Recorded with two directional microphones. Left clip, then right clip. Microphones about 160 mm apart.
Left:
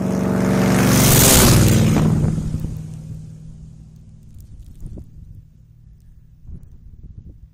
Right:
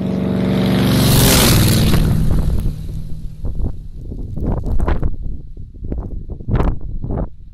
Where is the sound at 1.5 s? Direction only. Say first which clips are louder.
Right 1 dB; 40° right (ahead or behind).